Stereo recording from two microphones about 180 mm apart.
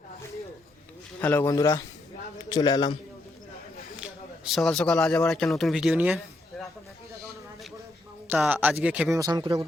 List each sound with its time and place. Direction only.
1.2 s a man's voice: 10° left (ahead or behind)
3.9 s speech: 5° right (ahead or behind)
8.3 s speech: 10° right (ahead or behind)
9.1 s speech: 20° right (ahead or behind)